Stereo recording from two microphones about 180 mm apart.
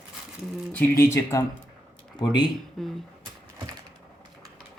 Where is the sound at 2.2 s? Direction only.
25° left (ahead or behind).